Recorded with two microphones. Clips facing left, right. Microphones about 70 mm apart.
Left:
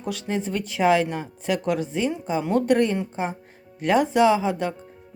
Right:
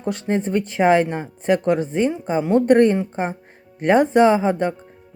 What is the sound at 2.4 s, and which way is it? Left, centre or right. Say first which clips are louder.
Speech: right 6 dB; right.